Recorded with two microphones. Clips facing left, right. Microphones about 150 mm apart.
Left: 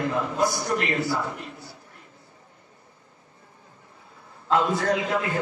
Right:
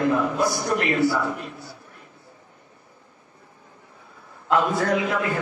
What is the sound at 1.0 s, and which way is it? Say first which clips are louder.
Speech: right 5 dB; 60° right (ahead or behind).